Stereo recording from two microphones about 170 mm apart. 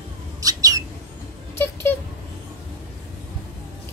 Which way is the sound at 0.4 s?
20° right (ahead or behind).